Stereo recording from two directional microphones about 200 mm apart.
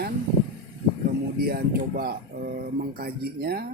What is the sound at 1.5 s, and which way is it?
Speech, 50° right (ahead or behind).